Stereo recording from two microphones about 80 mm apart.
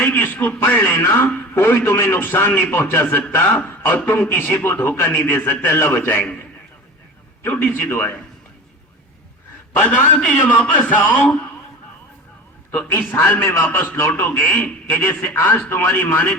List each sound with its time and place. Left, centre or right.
0.0 s a man's voice: left
7.5 s a man's voice: left
9.8 s a man's voice: centre
12.7 s a man's voice: left